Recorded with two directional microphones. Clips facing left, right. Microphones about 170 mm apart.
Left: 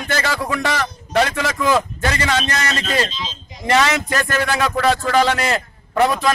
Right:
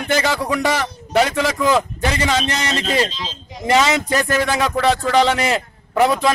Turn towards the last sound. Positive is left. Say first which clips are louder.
# right 1 dB
turn(degrees=-10)  # may be behind; listen again after turning